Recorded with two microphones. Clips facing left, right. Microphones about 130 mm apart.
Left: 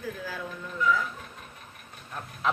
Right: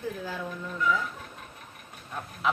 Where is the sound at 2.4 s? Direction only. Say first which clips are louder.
Even; 5° right (ahead or behind).